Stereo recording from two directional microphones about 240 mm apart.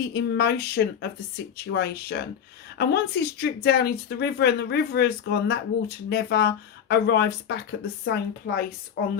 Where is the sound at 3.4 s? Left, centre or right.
Left.